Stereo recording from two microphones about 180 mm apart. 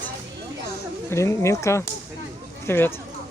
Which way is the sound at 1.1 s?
15° left (ahead or behind).